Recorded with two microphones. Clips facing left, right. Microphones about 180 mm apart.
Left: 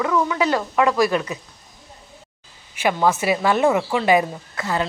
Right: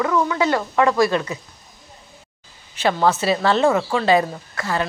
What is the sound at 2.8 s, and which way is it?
Speech, 15° left (ahead or behind).